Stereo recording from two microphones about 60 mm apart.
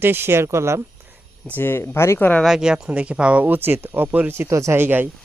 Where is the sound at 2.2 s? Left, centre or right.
Left.